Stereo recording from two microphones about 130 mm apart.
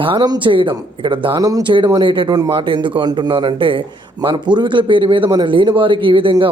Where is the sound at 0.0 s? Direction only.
35° right (ahead or behind).